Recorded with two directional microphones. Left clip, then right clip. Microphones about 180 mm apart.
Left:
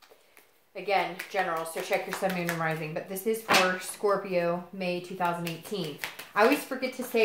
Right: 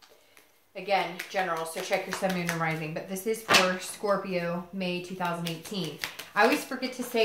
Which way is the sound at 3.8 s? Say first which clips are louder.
Left 1 dB; 35° left (ahead or behind).